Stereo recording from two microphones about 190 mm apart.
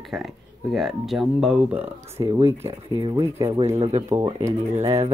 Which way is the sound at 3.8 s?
35° right (ahead or behind).